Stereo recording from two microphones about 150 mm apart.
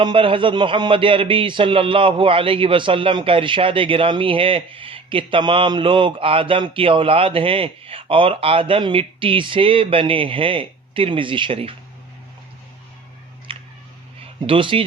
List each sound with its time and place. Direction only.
0.0 s a man's voice: 35° right (ahead or behind)
13.5 s a sound: 35° right (ahead or behind)
14.2 s speech: 35° right (ahead or behind)